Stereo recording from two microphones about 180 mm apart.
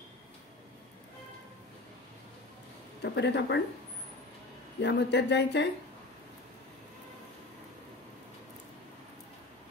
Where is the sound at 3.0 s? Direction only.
75° left (ahead or behind).